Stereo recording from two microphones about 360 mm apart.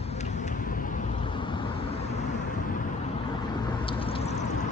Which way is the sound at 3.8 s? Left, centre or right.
Centre.